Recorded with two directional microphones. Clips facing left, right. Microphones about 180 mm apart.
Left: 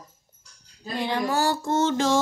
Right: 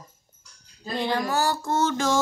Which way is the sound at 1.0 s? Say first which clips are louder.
Even; 20° left (ahead or behind).